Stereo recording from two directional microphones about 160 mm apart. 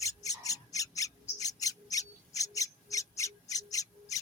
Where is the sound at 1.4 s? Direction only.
20° left (ahead or behind).